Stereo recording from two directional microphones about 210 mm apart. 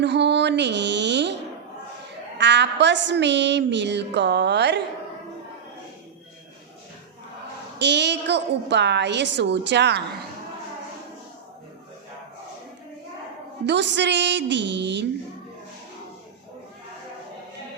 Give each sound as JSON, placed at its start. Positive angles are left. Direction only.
{"t": 0.0, "sound": "a sound", "side_deg": -55}
{"t": 2.4, "sound": "a woman's voice", "side_deg": -55}
{"t": 7.8, "sound": "a woman's voice", "side_deg": -55}
{"t": 13.7, "sound": "a woman's voice", "side_deg": -55}